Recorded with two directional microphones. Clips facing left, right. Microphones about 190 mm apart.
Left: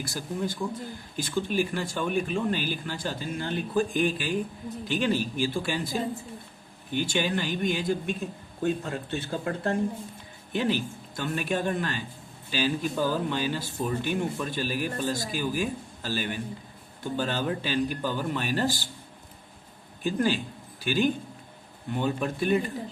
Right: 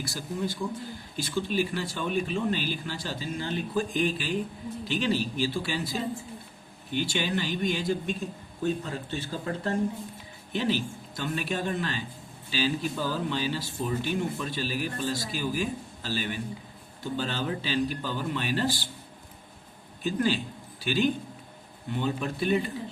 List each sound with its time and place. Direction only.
0.0 s speech: 50° left (ahead or behind)
20.1 s speech: 45° left (ahead or behind)